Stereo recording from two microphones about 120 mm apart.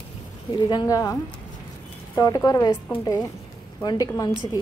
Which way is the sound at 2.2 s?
30° left (ahead or behind).